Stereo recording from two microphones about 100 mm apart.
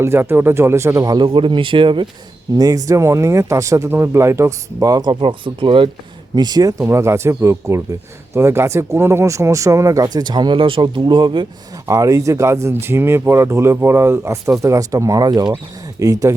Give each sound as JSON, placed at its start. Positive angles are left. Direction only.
{"t": 0.0, "sound": "speech", "side_deg": -25}
{"t": 2.6, "sound": "speech", "side_deg": -40}
{"t": 5.2, "sound": "speech", "side_deg": -60}
{"t": 6.3, "sound": "speech", "side_deg": -45}
{"t": 10.8, "sound": "speech", "side_deg": -50}
{"t": 11.9, "sound": "speech", "side_deg": -35}
{"t": 16.0, "sound": "speech", "side_deg": -35}